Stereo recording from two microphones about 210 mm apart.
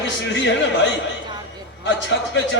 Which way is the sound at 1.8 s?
60° left (ahead or behind).